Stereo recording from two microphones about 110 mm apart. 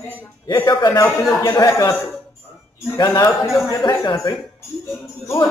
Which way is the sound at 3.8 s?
45° left (ahead or behind).